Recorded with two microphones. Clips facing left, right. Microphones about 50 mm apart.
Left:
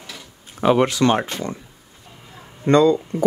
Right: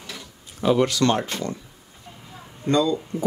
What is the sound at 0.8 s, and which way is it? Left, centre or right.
Speech, left.